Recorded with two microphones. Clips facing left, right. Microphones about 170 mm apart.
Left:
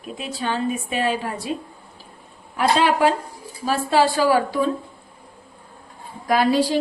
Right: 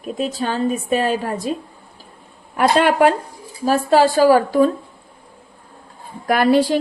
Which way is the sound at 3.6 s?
45° right (ahead or behind).